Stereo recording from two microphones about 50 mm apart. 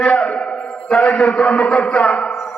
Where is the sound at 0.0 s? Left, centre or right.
Centre.